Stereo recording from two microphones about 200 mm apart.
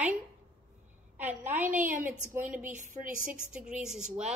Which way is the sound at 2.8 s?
40° right (ahead or behind).